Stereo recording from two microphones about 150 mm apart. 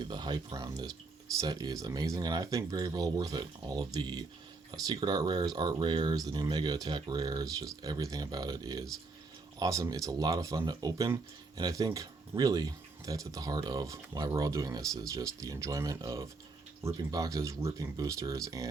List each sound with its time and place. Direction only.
0.0 s speech: 30° right (ahead or behind)